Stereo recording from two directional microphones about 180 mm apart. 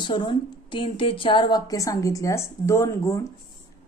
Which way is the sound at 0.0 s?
25° left (ahead or behind).